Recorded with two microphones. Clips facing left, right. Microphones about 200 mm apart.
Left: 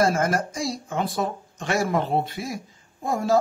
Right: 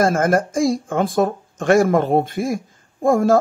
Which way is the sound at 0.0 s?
50° right (ahead or behind).